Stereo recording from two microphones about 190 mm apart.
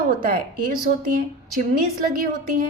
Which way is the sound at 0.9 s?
45° right (ahead or behind).